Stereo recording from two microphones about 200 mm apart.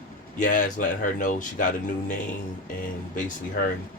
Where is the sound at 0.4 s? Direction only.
45° left (ahead or behind).